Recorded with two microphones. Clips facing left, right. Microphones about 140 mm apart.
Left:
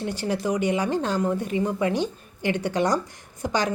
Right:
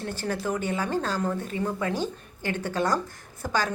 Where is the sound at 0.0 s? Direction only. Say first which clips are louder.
Left 3 dB; 15° left (ahead or behind).